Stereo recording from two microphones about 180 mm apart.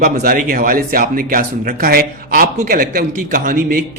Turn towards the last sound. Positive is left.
turn(degrees=-50)  # may be behind; listen again after turning